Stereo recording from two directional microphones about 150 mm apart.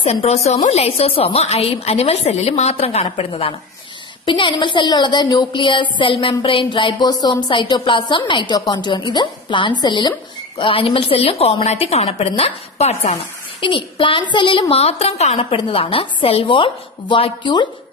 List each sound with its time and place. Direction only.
0.0 s a woman's voice: 45° left (ahead or behind)